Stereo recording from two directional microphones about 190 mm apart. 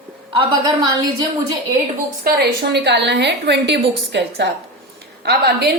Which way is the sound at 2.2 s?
60° right (ahead or behind).